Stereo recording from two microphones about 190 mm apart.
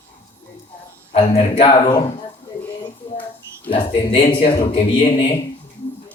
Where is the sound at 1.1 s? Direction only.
30° left (ahead or behind).